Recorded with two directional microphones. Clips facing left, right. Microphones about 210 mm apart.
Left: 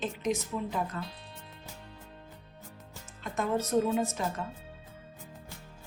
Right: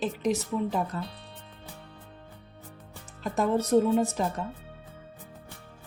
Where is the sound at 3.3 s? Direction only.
35° right (ahead or behind).